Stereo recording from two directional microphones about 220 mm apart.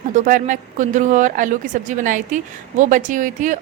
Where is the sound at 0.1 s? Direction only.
35° right (ahead or behind).